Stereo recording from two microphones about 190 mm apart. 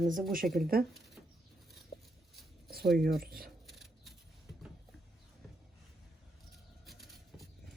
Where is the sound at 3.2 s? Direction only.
50° right (ahead or behind).